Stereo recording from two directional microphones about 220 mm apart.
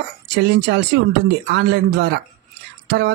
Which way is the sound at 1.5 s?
50° right (ahead or behind).